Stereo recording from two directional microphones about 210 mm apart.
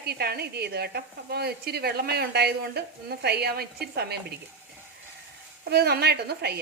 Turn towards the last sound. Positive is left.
turn(degrees=-50)  # may be behind; listen again after turning